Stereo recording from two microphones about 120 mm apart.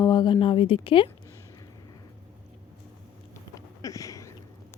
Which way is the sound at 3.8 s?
30° left (ahead or behind).